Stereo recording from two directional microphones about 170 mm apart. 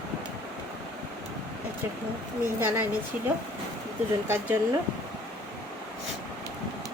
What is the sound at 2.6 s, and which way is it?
Speech, 15° right (ahead or behind).